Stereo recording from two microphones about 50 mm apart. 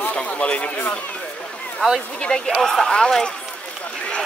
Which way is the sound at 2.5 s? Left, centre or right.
Centre.